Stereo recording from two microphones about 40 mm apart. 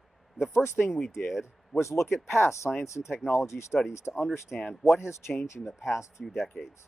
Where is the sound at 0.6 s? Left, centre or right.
Left.